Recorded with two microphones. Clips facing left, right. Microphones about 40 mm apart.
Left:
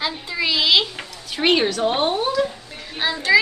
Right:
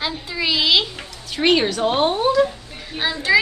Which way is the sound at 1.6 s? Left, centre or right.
Centre.